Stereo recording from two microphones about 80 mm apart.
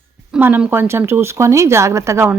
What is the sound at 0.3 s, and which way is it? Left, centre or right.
Speech, right.